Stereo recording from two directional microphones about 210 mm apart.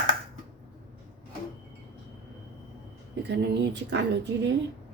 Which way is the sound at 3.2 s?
55° right (ahead or behind).